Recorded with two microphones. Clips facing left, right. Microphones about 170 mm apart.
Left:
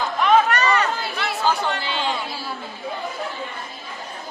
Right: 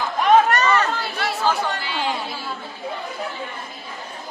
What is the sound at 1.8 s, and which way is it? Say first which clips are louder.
Chatter: even; 25° left (ahead or behind).